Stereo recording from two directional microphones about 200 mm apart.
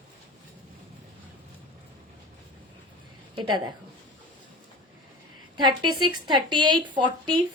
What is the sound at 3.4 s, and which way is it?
Speech, 25° right (ahead or behind).